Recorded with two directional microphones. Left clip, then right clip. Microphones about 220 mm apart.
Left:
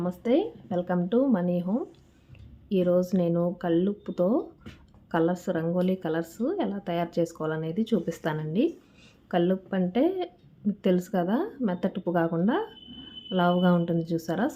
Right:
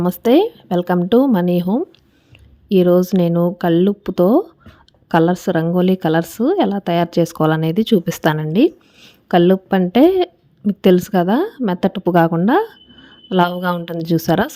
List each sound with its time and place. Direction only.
0.0 s a woman's voice: 45° right (ahead or behind)